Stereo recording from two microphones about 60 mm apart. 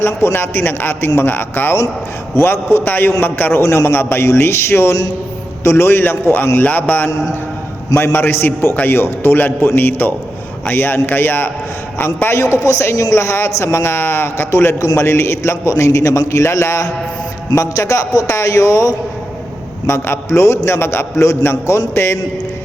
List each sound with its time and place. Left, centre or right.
0.0 s a man's voice: left
3.6 s a man's voice: left
12.0 s a man's voice: left
12.6 s a man's voice: left
19.9 s a man's voice: left